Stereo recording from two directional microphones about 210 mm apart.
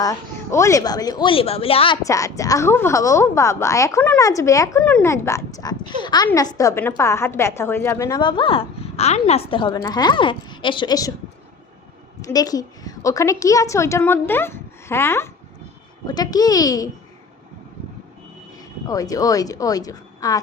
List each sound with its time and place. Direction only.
0.0 s a woman's voice: 15° left (ahead or behind)
2.0 s a woman's voice: 15° left (ahead or behind)
12.2 s a woman's voice: 15° left (ahead or behind)
18.9 s a woman's voice: 15° left (ahead or behind)